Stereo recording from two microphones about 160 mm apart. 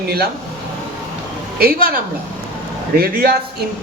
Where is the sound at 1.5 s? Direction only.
70° right (ahead or behind).